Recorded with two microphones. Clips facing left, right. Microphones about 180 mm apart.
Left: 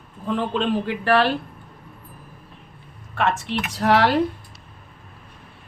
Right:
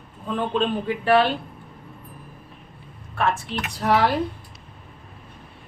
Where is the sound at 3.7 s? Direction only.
85° left.